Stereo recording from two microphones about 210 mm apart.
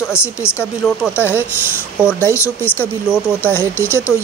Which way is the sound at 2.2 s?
10° left (ahead or behind).